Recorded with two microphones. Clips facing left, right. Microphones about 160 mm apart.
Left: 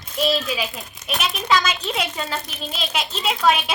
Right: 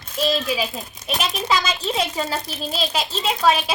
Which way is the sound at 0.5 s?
30° right (ahead or behind).